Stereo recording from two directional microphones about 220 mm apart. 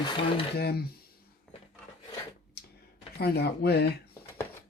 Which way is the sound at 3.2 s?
45° left (ahead or behind).